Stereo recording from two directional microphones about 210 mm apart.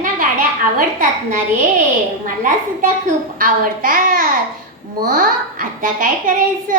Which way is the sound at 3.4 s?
40° right (ahead or behind).